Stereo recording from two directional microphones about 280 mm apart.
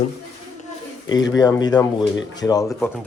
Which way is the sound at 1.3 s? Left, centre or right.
Centre.